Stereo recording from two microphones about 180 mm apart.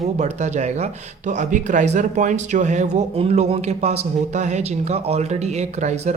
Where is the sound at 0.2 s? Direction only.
40° right (ahead or behind).